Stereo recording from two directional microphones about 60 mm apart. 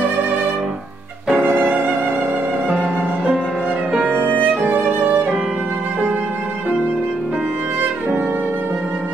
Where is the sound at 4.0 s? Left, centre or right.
Right.